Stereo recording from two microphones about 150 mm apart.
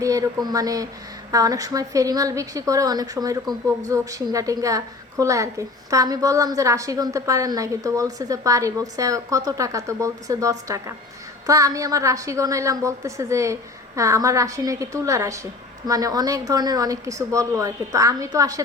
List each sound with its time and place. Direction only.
0.0 s a woman's voice: 20° right (ahead or behind)